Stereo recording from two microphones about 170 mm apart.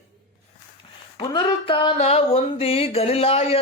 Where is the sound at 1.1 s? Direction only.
30° left (ahead or behind).